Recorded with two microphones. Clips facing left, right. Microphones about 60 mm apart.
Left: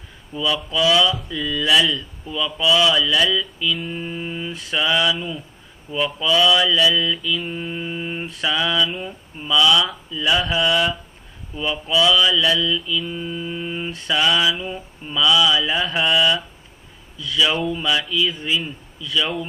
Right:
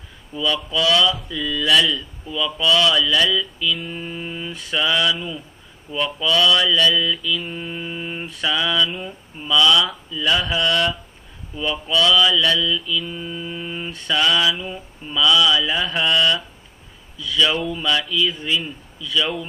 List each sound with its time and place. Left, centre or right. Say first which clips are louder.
0.3 s mantra: even; centre